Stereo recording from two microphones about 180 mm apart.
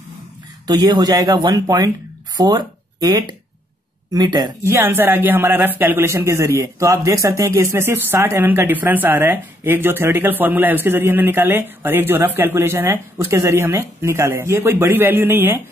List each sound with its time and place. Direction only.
0.7 s a woman's voice: 20° right (ahead or behind)